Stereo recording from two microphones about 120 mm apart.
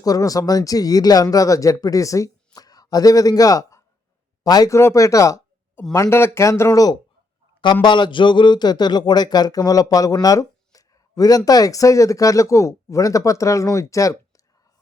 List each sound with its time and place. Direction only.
0.0 s a man's voice: 30° left (ahead or behind)
7.6 s a man's voice: 40° left (ahead or behind)